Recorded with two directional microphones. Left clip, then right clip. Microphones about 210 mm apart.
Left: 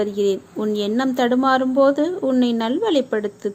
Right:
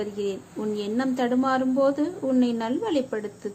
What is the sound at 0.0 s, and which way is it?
A woman's voice, 25° left (ahead or behind).